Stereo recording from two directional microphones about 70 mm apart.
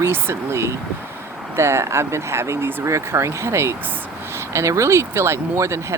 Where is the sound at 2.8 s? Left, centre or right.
Right.